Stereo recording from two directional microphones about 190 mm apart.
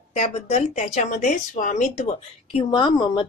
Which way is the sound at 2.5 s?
25° left (ahead or behind).